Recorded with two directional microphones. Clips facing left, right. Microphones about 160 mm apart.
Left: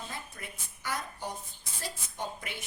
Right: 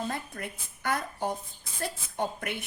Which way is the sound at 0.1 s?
55° right (ahead or behind).